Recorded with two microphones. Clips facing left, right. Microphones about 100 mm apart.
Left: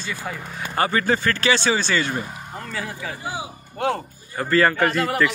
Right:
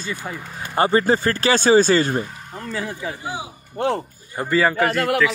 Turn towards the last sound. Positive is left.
turn(degrees=-5)  # may be behind; listen again after turning